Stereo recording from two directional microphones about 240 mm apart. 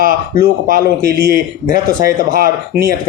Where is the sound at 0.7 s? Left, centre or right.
Right.